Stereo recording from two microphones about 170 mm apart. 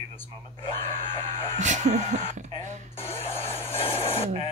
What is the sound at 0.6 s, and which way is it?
Screaming, 35° left (ahead or behind).